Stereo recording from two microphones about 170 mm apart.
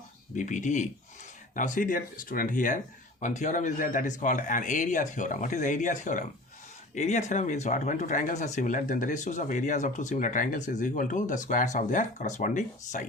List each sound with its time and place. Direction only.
0.3 s speech: 45° left (ahead or behind)